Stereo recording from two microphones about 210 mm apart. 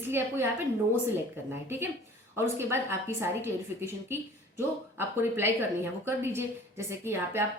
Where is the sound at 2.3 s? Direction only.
10° right (ahead or behind).